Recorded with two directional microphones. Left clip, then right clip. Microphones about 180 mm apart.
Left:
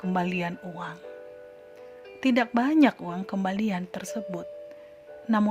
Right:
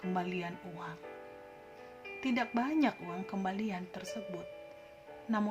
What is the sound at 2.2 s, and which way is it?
Speech, 60° left (ahead or behind).